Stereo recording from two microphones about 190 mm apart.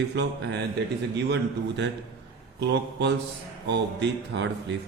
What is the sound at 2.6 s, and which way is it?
Speech, 65° right (ahead or behind).